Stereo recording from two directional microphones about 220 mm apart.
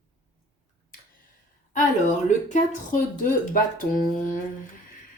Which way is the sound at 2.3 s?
35° left (ahead or behind).